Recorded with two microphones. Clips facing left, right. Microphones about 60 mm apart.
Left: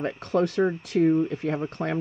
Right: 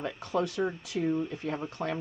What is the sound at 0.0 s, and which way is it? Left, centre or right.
Speech, left.